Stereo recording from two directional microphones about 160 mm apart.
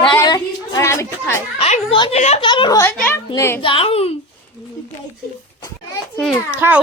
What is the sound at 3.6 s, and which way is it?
Speech, 35° left (ahead or behind).